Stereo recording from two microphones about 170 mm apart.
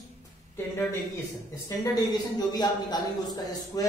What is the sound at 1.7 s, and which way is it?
Speech, 20° left (ahead or behind).